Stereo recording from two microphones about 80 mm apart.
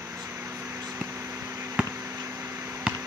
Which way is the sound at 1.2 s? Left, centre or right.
Right.